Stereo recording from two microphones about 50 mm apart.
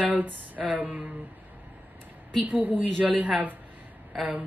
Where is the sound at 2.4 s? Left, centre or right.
Right.